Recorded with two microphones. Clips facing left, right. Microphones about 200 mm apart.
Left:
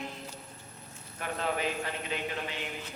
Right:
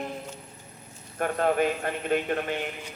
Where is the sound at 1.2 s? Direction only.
50° right (ahead or behind).